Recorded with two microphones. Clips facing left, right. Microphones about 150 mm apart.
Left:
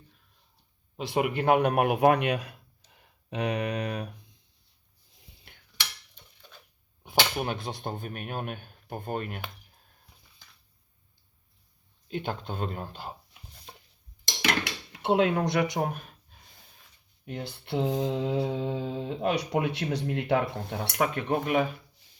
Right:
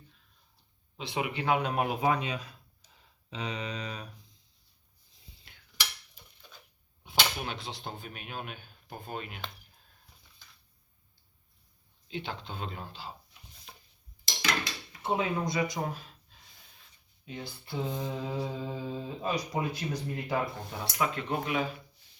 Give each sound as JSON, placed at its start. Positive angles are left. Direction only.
{"t": 0.9, "sound": "a man's voice", "side_deg": 50}
{"t": 7.0, "sound": "speech", "side_deg": 50}
{"t": 12.0, "sound": "speech", "side_deg": 50}
{"t": 14.4, "sound": "dishes", "side_deg": 65}
{"t": 17.2, "sound": "mantra", "side_deg": 65}